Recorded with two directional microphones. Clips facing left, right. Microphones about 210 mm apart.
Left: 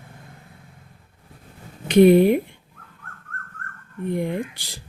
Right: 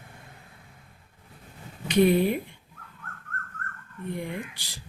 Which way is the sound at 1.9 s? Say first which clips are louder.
Left 8 dB; 55° left (ahead or behind).